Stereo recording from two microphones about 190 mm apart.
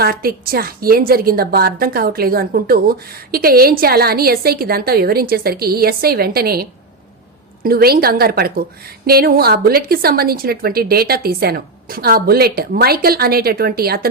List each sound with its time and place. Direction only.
0.0 s a woman's voice: 50° right (ahead or behind)